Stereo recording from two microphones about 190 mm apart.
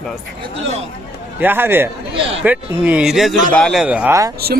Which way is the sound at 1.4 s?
10° right (ahead or behind).